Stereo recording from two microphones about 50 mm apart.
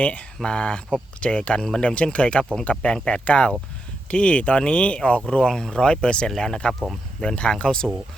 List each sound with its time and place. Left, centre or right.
0.0 s speech: left